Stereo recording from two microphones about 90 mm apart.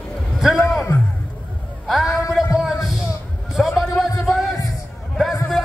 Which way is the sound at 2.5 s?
5° right (ahead or behind).